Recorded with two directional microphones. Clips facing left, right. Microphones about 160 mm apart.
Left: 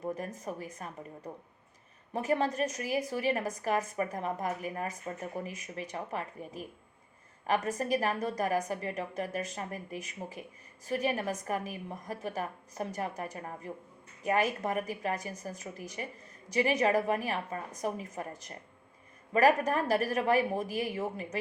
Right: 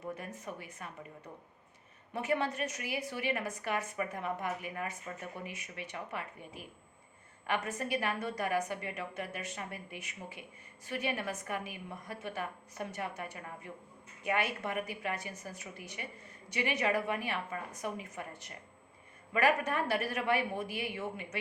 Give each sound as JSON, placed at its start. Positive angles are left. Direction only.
{"t": 0.3, "sound": "a woman's voice", "side_deg": 40}